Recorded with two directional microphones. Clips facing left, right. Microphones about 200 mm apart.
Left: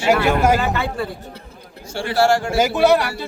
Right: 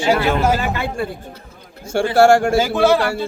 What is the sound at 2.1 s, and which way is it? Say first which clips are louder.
Speech: right 5 dB; 50° right (ahead or behind).